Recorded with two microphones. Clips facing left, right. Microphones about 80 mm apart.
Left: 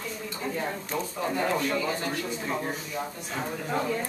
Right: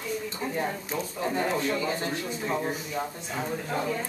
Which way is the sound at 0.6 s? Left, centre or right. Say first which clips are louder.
Right 1 dB; centre.